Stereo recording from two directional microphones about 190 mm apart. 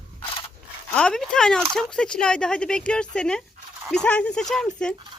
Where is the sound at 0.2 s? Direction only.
25° left (ahead or behind).